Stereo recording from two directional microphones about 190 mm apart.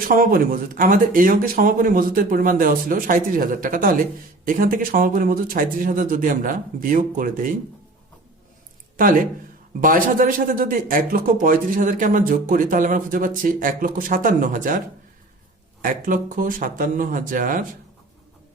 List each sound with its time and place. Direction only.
0.1 s a man's voice: 50° right (ahead or behind)
9.0 s a man's voice: 45° right (ahead or behind)
15.8 s a man's voice: 45° right (ahead or behind)